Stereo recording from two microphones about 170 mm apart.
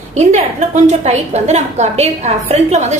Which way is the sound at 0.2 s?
45° right (ahead or behind).